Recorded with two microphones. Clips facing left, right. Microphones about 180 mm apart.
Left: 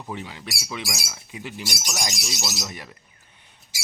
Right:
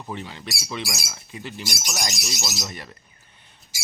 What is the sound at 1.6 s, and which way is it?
Speech, centre (ahead or behind).